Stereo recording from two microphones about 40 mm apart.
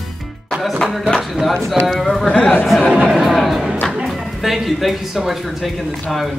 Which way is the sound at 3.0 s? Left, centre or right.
Centre.